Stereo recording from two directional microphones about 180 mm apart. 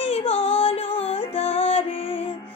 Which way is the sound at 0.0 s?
35° left (ahead or behind).